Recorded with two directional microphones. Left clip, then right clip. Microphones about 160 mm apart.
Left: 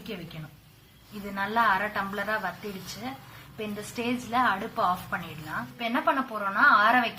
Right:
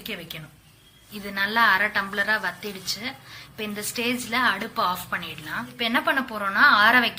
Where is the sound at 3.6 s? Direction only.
10° right (ahead or behind).